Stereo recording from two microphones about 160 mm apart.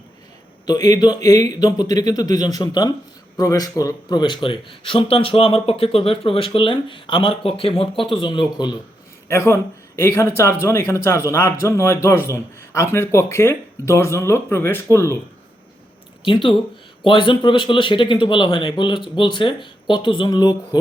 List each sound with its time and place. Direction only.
0.7 s speech: 25° left (ahead or behind)
9.3 s speech: 15° left (ahead or behind)
16.2 s speech: 30° left (ahead or behind)